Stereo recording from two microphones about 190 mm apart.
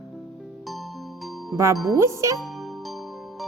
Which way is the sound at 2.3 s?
Centre (ahead or behind).